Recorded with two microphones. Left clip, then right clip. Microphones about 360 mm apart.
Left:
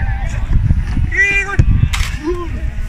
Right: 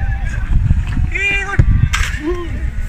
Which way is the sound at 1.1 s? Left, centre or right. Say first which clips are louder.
Left 3 dB; centre.